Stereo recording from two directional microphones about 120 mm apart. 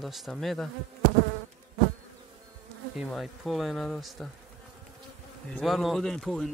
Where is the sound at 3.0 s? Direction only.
Centre (ahead or behind).